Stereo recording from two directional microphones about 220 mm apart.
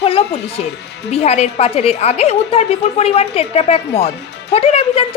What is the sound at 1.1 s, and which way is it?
A woman's voice, 30° left (ahead or behind).